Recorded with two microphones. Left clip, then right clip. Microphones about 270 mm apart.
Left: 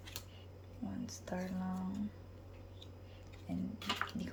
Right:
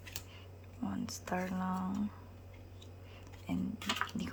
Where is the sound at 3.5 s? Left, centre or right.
Centre.